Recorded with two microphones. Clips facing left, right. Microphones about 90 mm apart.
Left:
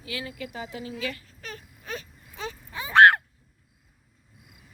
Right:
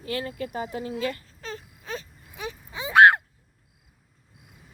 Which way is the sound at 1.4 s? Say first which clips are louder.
Right 4 dB; 25° right (ahead or behind).